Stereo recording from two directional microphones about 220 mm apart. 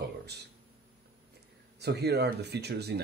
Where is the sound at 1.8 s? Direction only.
50° right (ahead or behind).